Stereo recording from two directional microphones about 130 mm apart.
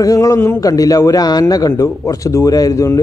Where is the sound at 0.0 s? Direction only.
25° left (ahead or behind).